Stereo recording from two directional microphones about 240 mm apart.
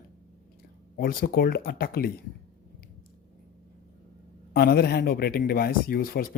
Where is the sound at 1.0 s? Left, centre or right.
Left.